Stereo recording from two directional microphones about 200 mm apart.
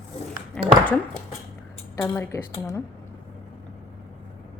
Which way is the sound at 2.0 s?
10° left (ahead or behind).